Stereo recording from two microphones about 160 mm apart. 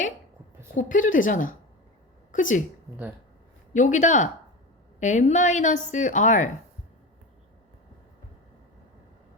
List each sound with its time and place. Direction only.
0.8 s speech: 55° left (ahead or behind)
3.7 s a woman's voice: 50° left (ahead or behind)